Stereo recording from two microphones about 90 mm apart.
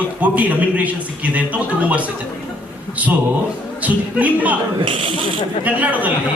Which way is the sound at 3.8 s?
15° right (ahead or behind).